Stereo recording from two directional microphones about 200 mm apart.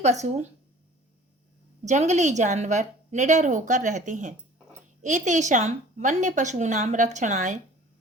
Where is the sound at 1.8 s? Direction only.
35° right (ahead or behind).